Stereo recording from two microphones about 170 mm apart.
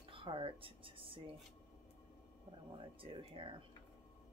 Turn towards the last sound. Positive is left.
turn(degrees=-30)  # may be behind; listen again after turning